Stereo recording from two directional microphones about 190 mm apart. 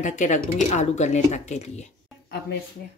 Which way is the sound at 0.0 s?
40° left (ahead or behind).